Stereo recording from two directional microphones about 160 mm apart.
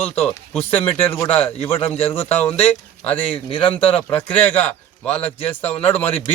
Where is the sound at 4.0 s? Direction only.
10° left (ahead or behind).